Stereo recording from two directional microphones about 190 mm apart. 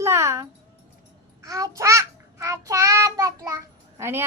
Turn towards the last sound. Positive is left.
turn(degrees=-15)  # may be behind; listen again after turning